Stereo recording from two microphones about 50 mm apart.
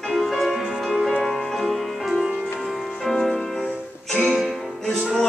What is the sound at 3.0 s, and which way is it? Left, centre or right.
Music, centre.